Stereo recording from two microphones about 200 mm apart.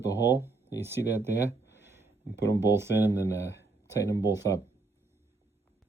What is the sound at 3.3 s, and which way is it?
Speech, 15° left (ahead or behind).